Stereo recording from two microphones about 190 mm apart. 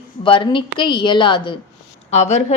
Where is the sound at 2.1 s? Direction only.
35° left (ahead or behind).